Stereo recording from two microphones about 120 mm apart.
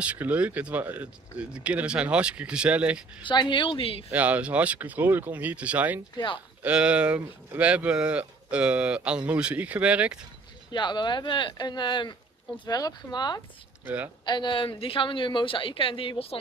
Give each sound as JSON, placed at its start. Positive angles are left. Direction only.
{"t": 0.0, "sound": "speech", "side_deg": -10}
{"t": 3.2, "sound": "a woman's voice", "side_deg": 40}
{"t": 4.1, "sound": "speech", "side_deg": -10}
{"t": 6.1, "sound": "a woman's voice", "side_deg": 45}
{"t": 6.6, "sound": "speech", "side_deg": -10}
{"t": 10.7, "sound": "speech", "side_deg": 40}
{"t": 13.8, "sound": "speech", "side_deg": -15}
{"t": 14.2, "sound": "a woman's voice", "side_deg": 40}